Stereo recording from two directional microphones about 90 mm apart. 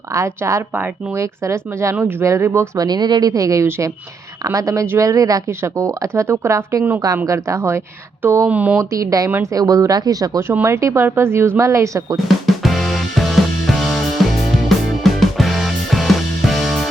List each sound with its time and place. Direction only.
0.1 s a woman's voice: 35° right (ahead or behind)
0.7 s a woman's voice: 25° right (ahead or behind)
2.0 s a woman's voice: 25° right (ahead or behind)
2.8 s a woman's voice: 50° right (ahead or behind); by 8.4 s 30° right (ahead or behind)
8.4 s speech: 15° right (ahead or behind)
8.8 s a woman's voice: 35° right (ahead or behind)
10.5 s a woman's voice: 30° right (ahead or behind)
12.1 s music: centre (ahead or behind)